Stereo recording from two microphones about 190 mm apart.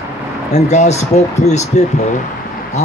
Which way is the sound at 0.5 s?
35° left (ahead or behind).